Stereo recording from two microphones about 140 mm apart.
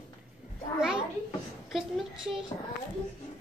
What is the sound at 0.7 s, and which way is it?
Speech, 5° right (ahead or behind).